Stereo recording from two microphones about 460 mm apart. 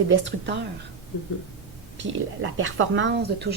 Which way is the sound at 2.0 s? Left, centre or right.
Right.